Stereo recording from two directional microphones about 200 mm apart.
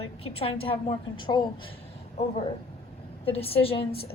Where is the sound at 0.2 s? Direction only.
30° left (ahead or behind).